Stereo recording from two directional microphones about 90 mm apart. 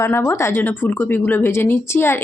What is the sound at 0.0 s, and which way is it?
A woman's voice, 25° left (ahead or behind).